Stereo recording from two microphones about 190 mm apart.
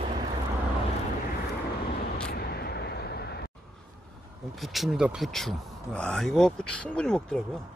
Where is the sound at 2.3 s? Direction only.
55° left (ahead or behind).